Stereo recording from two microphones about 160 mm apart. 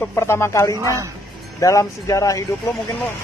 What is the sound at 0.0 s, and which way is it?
Speech, 15° left (ahead or behind).